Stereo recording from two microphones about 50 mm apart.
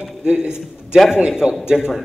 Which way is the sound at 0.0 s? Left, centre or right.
Centre.